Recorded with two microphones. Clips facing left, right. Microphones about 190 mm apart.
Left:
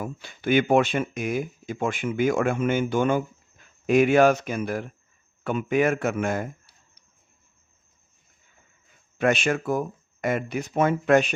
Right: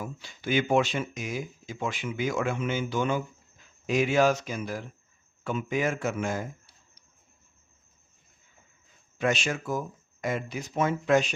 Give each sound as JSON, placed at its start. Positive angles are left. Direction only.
{"t": 0.0, "sound": "speech", "side_deg": 55}
{"t": 9.1, "sound": "speech", "side_deg": 60}